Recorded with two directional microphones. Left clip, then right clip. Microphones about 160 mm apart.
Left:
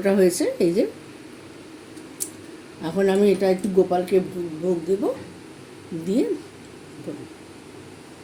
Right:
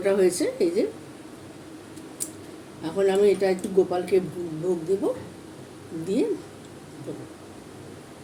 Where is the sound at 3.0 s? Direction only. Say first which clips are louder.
Left 1 dB; 60° left (ahead or behind).